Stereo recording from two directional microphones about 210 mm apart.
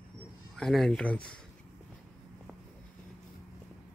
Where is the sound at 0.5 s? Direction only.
Centre (ahead or behind).